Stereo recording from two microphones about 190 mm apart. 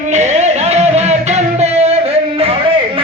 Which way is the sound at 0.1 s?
40° right (ahead or behind).